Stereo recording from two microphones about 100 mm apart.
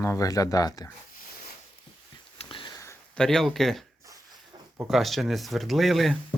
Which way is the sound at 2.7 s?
30° left (ahead or behind).